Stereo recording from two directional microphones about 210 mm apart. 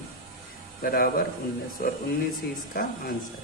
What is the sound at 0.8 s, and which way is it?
Speech, 45° left (ahead or behind).